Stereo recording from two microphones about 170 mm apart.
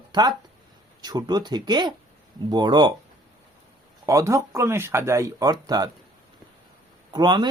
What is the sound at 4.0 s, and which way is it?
Speech, 20° right (ahead or behind).